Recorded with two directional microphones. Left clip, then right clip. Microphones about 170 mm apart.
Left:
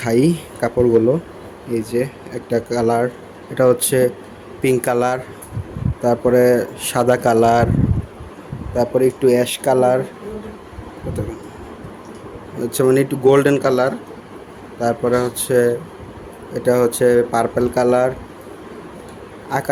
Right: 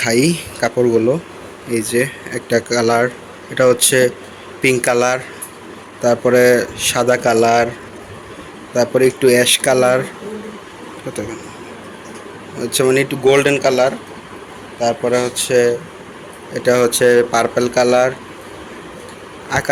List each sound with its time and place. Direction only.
0.0 s speech: 20° left (ahead or behind)
0.8 s speech: centre (ahead or behind)
6.3 s speech: 20° left (ahead or behind)
9.0 s speech: 15° left (ahead or behind)
12.5 s speech: 25° left (ahead or behind)
15.0 s speech: 20° left (ahead or behind)
15.4 s speech: 30° left (ahead or behind)
16.5 s speech: 20° left (ahead or behind)
19.5 s speech: 20° left (ahead or behind)